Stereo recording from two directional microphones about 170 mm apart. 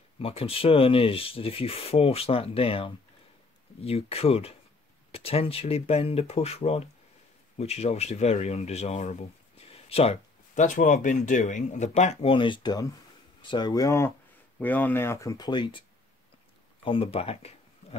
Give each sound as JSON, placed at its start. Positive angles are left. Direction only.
{"t": 0.2, "sound": "speech", "side_deg": 35}
{"t": 16.8, "sound": "speech", "side_deg": 35}
{"t": 17.8, "sound": "insect", "side_deg": 40}